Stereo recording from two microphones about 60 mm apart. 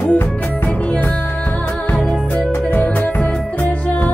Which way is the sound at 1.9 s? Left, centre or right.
Left.